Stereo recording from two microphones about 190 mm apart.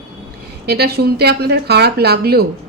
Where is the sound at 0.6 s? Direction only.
55° right (ahead or behind).